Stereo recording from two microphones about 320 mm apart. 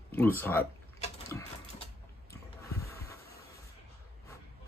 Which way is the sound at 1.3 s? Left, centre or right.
Centre.